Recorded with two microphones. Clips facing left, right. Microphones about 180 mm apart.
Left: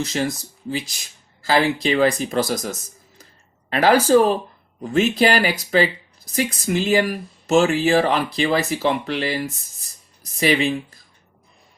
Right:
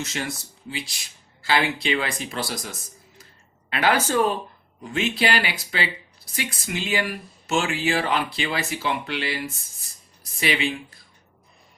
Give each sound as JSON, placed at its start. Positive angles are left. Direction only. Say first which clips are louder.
{"t": 0.0, "sound": "speech", "louder": "left 7 dB", "side_deg": 35}
{"t": 1.4, "sound": "speech", "louder": "left 5 dB", "side_deg": 40}
{"t": 10.4, "sound": "speech", "louder": "left 6 dB", "side_deg": 40}